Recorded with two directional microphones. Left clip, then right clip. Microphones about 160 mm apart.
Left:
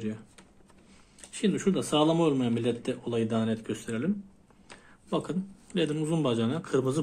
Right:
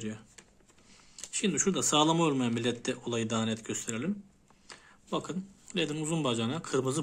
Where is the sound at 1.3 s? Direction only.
20° right (ahead or behind).